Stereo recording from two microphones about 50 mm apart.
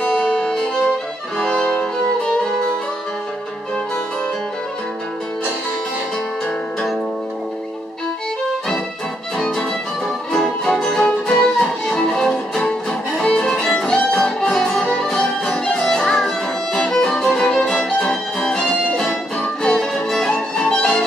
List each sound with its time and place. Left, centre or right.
0.0 s music: centre
1.4 s violin: centre
10.3 s music: centre